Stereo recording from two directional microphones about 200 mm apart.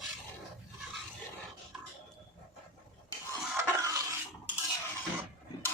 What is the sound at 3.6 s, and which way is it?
Stir, 15° right (ahead or behind).